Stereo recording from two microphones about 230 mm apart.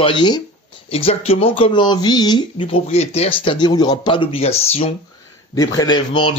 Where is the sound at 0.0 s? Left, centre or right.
Centre.